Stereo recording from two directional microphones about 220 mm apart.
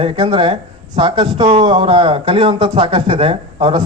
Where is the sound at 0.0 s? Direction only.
25° right (ahead or behind).